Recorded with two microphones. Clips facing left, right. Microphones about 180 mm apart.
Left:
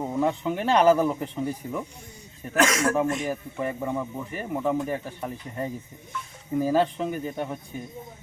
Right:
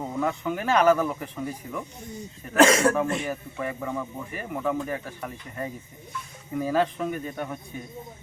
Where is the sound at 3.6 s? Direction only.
25° left (ahead or behind).